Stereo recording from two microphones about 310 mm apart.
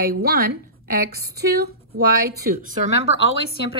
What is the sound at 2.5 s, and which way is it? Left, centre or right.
Speech, right.